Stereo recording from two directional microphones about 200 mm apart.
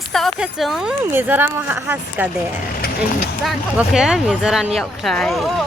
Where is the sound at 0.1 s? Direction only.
Centre (ahead or behind).